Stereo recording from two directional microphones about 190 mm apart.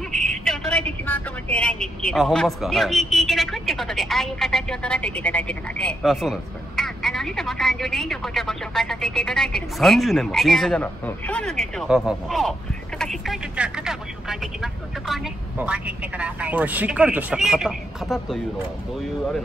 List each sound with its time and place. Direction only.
0.5 s a woman's voice: 5° left (ahead or behind)